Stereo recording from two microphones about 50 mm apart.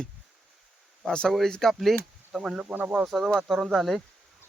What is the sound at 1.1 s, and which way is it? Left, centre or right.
Speech, centre.